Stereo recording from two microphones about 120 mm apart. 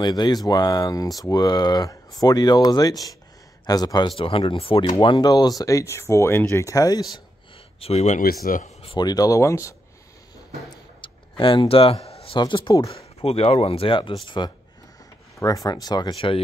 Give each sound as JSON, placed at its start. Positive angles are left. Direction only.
{"t": 0.0, "sound": "speech", "side_deg": 35}
{"t": 4.2, "sound": "speech", "side_deg": 50}
{"t": 5.0, "sound": "speech", "side_deg": 35}
{"t": 7.8, "sound": "speech", "side_deg": 65}
{"t": 8.9, "sound": "speech", "side_deg": 35}
{"t": 10.7, "sound": "a sound", "side_deg": 45}
{"t": 12.4, "sound": "speech", "side_deg": 40}
{"t": 15.3, "sound": "speech", "side_deg": 30}